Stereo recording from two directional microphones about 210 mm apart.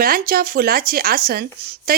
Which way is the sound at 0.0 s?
45° right (ahead or behind).